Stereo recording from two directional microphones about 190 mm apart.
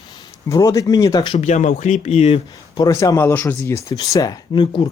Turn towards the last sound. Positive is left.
turn(degrees=25)  # may be behind; listen again after turning